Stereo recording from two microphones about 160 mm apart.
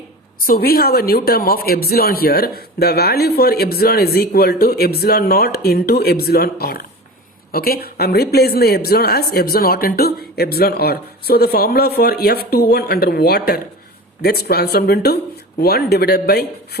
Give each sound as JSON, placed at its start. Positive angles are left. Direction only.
{"t": 0.4, "sound": "speech", "side_deg": 70}